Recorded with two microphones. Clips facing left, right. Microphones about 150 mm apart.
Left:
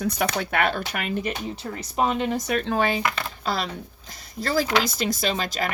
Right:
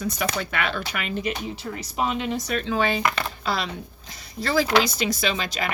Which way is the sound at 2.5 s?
55° left (ahead or behind).